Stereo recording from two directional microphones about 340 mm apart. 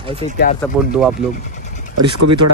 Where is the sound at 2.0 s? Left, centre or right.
Right.